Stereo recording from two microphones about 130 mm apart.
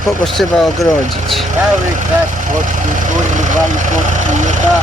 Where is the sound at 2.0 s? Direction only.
90° right; by 4.5 s 70° right (ahead or behind).